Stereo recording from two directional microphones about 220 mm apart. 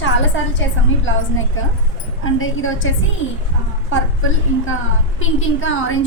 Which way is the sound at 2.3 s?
65° left (ahead or behind).